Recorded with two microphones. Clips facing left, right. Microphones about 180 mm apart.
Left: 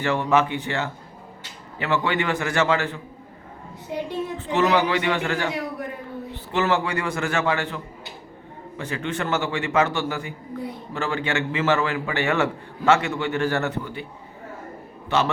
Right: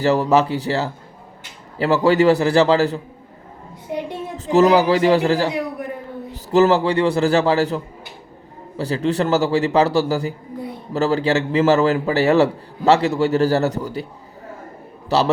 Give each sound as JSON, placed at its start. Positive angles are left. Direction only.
{"t": 0.0, "sound": "a man's voice", "side_deg": -40}
{"t": 4.4, "sound": "a man's voice", "side_deg": -40}
{"t": 8.8, "sound": "a man's voice", "side_deg": -35}
{"t": 15.1, "sound": "a man's voice", "side_deg": -40}